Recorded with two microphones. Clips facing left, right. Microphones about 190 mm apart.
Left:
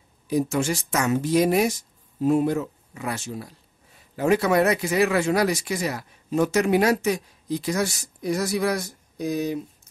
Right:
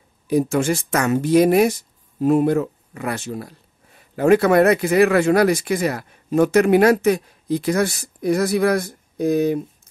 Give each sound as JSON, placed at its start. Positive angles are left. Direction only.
{"t": 0.3, "sound": "speech", "side_deg": -60}